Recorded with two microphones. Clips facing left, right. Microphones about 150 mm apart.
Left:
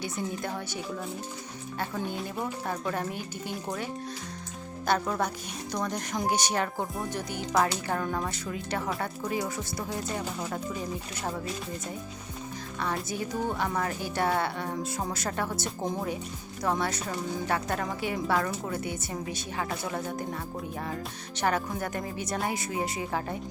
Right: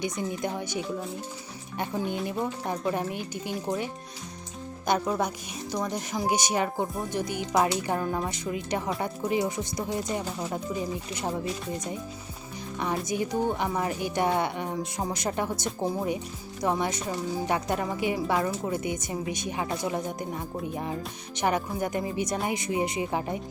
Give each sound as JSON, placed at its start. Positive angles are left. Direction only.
{"t": 0.0, "sound": "a woman's voice", "side_deg": -15}
{"t": 4.9, "sound": "a woman's voice", "side_deg": -10}
{"t": 12.8, "sound": "a woman's voice", "side_deg": -15}